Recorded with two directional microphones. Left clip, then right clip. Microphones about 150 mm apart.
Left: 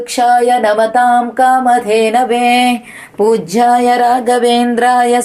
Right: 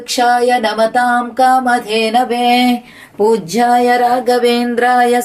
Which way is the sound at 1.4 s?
20° right (ahead or behind).